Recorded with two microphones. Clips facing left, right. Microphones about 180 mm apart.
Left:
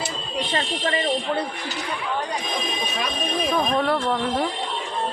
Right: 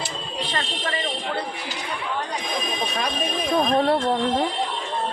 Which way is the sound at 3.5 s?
30° right (ahead or behind).